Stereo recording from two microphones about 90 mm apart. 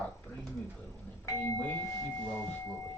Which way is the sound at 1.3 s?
35° left (ahead or behind).